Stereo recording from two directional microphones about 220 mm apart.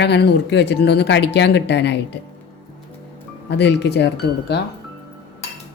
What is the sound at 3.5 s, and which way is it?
Speech, 50° left (ahead or behind).